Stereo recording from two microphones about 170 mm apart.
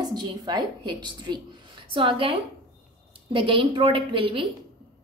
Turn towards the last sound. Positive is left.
turn(degrees=-30)  # may be behind; listen again after turning